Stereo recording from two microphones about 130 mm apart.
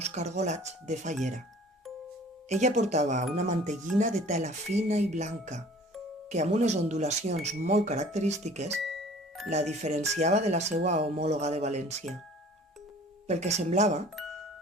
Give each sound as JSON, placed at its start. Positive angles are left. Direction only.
{"t": 0.0, "sound": "speech", "side_deg": -60}
{"t": 2.5, "sound": "speech", "side_deg": -65}
{"t": 8.8, "sound": "music", "side_deg": 0}
{"t": 9.5, "sound": "speech", "side_deg": -60}
{"t": 13.2, "sound": "speech", "side_deg": -60}